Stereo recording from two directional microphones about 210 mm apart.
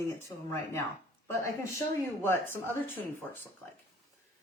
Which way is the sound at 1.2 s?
15° left (ahead or behind).